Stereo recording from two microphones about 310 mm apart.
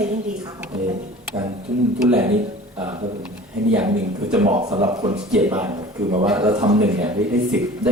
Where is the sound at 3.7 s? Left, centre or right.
Centre.